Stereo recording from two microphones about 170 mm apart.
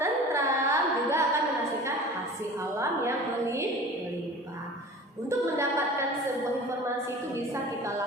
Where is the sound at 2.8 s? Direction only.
15° right (ahead or behind).